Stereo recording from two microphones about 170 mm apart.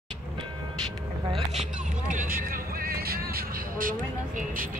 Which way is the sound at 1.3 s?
45° right (ahead or behind).